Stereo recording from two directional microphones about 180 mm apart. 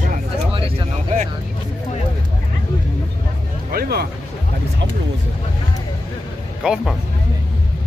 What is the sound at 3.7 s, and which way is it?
Music, 60° right (ahead or behind).